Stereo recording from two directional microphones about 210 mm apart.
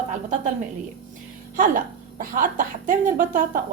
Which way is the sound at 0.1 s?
35° right (ahead or behind).